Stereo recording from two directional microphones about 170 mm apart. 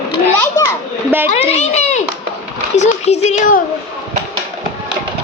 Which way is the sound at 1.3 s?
40° left (ahead or behind).